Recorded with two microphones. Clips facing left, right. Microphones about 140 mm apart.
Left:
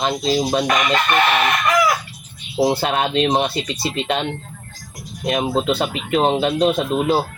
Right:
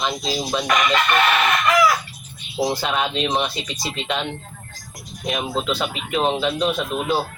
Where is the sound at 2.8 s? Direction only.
55° left (ahead or behind).